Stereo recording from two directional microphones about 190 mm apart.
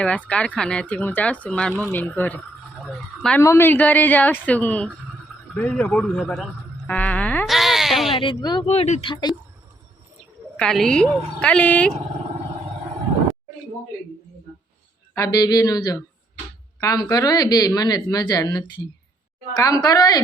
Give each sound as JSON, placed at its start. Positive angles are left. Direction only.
{"t": 0.0, "sound": "a woman's voice", "side_deg": 5}
{"t": 6.8, "sound": "a sound", "side_deg": 5}
{"t": 8.1, "sound": "speech", "side_deg": 25}
{"t": 8.6, "sound": "speech", "side_deg": 35}
{"t": 10.6, "sound": "a woman's voice", "side_deg": 5}
{"t": 15.1, "sound": "speech", "side_deg": 20}